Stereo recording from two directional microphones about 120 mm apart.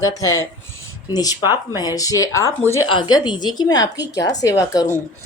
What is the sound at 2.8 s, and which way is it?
A woman's voice, 40° left (ahead or behind).